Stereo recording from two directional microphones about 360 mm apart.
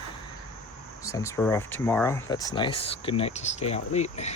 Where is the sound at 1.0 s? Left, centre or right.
Centre.